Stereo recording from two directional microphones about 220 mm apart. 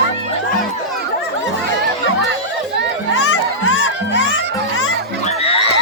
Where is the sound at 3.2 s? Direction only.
75° left (ahead or behind).